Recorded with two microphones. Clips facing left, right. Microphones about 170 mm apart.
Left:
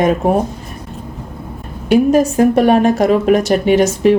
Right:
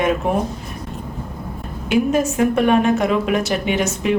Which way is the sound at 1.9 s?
35° left (ahead or behind).